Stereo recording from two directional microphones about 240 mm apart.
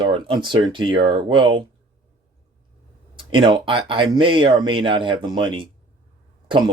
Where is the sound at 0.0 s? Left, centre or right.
Centre.